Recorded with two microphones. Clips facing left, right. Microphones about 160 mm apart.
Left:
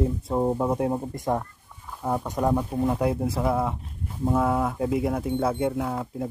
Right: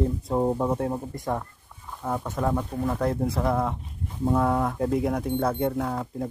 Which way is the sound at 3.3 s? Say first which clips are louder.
Even; 5° left (ahead or behind).